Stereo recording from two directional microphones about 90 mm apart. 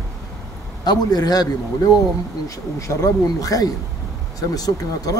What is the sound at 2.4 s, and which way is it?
Speech, 35° left (ahead or behind).